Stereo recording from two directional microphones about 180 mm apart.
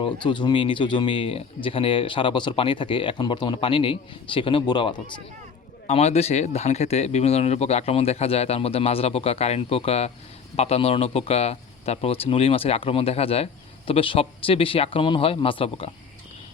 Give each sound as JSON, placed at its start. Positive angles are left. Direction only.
{"t": 0.0, "sound": "speech", "side_deg": 25}
{"t": 5.9, "sound": "speech", "side_deg": 35}